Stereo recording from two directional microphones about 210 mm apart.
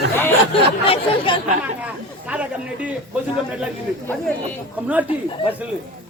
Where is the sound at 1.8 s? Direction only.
5° right (ahead or behind).